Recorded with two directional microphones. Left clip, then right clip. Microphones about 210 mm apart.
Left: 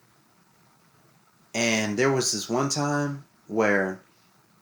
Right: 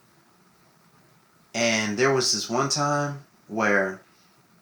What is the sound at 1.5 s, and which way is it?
Speech, 30° left (ahead or behind).